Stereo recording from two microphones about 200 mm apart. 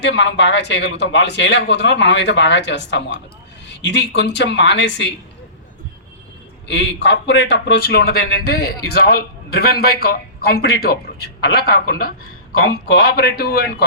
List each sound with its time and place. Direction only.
0.0 s a man's voice: 60° left (ahead or behind)
6.7 s a man's voice: 60° left (ahead or behind)
12.5 s a man's voice: 90° left
13.1 s a man's voice: 50° left (ahead or behind)